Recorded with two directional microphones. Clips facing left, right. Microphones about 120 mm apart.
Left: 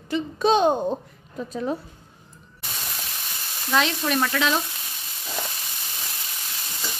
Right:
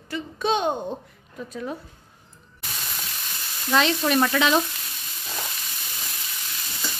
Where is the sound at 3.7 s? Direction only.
Centre (ahead or behind).